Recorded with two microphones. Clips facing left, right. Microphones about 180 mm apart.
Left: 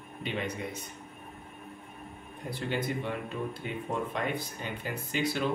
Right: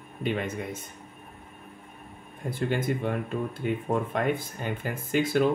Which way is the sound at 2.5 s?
50° right (ahead or behind).